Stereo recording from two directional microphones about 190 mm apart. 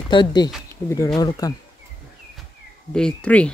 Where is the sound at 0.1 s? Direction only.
25° left (ahead or behind).